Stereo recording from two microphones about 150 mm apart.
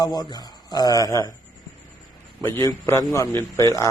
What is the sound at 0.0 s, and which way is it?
Speech, 25° left (ahead or behind).